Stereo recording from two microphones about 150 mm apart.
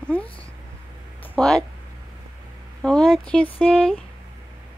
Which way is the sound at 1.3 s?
5° left (ahead or behind).